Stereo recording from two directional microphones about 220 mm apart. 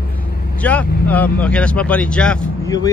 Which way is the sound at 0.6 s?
5° left (ahead or behind).